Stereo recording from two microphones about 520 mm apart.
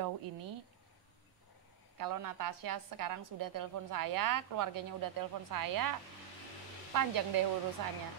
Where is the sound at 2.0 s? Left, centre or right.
Right.